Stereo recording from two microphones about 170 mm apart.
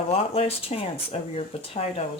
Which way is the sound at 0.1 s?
35° left (ahead or behind).